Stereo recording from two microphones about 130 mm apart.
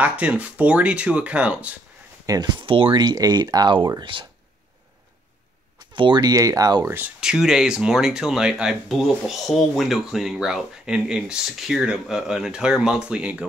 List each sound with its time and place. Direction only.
0.0 s speech: 10° right (ahead or behind)
2.2 s speech: 30° right (ahead or behind)
5.8 s speech: 35° right (ahead or behind)
6.9 s speech: 10° right (ahead or behind)